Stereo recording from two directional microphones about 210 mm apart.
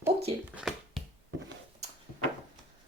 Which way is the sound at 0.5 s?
Centre (ahead or behind).